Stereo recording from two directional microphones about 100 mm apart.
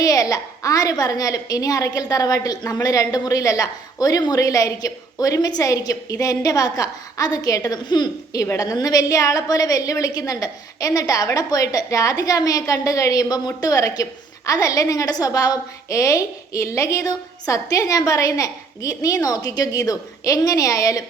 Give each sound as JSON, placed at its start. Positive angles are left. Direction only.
{"t": 0.0, "sound": "a woman's voice", "side_deg": 35}